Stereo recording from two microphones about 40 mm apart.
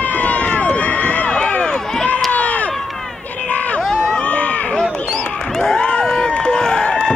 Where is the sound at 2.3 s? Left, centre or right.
Left.